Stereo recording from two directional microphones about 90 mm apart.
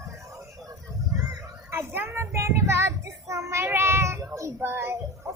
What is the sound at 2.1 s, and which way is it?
Child singing, 30° right (ahead or behind).